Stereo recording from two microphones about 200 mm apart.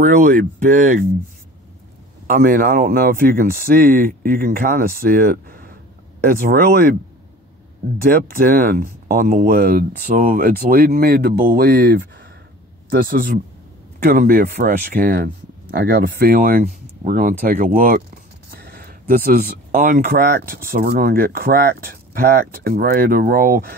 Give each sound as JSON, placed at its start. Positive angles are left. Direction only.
{"t": 0.0, "sound": "speech", "side_deg": -40}
{"t": 2.2, "sound": "speech", "side_deg": -45}
{"t": 8.0, "sound": "speech", "side_deg": -50}